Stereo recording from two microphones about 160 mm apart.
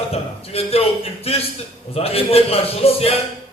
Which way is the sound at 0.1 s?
40° left (ahead or behind).